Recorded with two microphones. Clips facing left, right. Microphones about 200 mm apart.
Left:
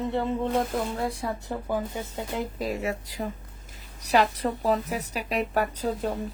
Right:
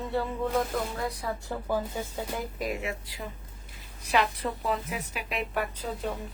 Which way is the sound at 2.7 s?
40° left (ahead or behind).